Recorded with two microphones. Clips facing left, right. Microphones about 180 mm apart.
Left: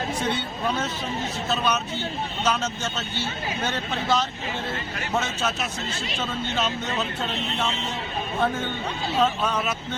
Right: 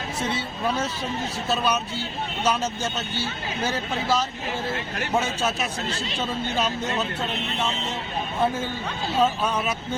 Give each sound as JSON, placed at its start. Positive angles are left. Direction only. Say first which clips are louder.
{"t": 0.2, "sound": "speech", "louder": "even", "side_deg": -5}
{"t": 3.6, "sound": "speech", "louder": "right 3 dB", "side_deg": -10}
{"t": 6.6, "sound": "speech", "louder": "right 1 dB", "side_deg": -10}
{"t": 9.1, "sound": "speech", "louder": "right 1 dB", "side_deg": -10}